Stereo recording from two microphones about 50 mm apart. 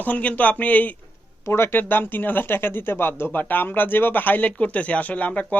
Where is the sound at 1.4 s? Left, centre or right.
Left.